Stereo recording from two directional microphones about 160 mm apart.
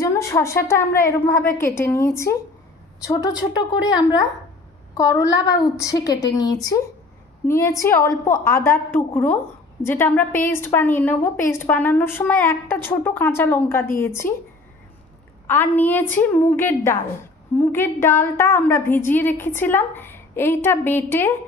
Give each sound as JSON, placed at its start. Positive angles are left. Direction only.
{"t": 0.0, "sound": "a woman's voice", "side_deg": 20}
{"t": 15.4, "sound": "a woman's voice", "side_deg": 15}